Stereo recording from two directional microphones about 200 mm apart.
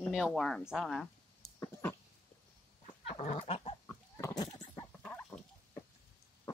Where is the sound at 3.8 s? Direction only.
10° left (ahead or behind).